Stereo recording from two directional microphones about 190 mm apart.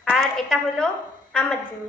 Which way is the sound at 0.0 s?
Centre (ahead or behind).